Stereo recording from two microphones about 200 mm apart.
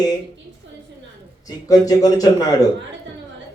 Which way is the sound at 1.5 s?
20° left (ahead or behind).